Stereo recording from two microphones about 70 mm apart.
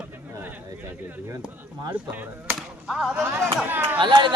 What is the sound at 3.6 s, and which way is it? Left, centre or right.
Speech, right.